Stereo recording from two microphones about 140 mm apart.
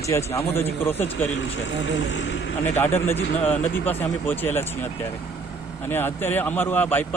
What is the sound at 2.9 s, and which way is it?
Speech, 15° left (ahead or behind).